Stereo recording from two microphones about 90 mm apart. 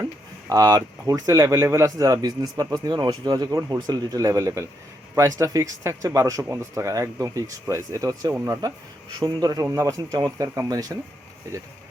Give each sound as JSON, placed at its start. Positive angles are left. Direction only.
{"t": 0.0, "sound": "speech", "side_deg": -40}
{"t": 2.2, "sound": "speech", "side_deg": -45}